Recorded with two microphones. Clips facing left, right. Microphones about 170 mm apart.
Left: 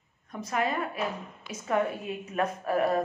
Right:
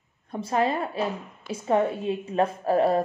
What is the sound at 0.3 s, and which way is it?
A woman's voice, 30° right (ahead or behind).